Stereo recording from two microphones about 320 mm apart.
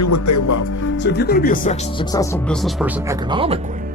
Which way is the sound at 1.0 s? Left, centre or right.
Left.